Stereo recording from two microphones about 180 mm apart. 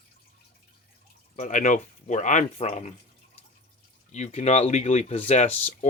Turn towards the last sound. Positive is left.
turn(degrees=40)  # may be behind; listen again after turning